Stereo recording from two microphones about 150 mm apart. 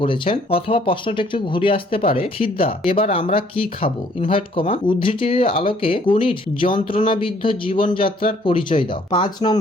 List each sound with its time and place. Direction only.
0.0 s speech: 35° left (ahead or behind)